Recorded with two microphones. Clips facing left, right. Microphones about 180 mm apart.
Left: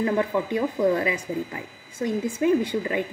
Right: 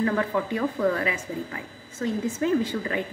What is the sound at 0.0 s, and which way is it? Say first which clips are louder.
Speech: left 1 dB; 15° left (ahead or behind).